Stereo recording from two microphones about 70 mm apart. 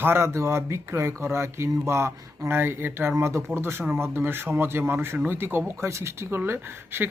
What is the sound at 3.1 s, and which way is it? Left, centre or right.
Speech, right.